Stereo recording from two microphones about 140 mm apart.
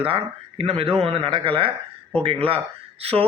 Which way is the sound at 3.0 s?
45° right (ahead or behind).